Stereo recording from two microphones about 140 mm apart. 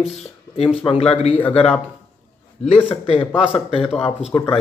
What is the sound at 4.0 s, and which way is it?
Speech, 40° left (ahead or behind).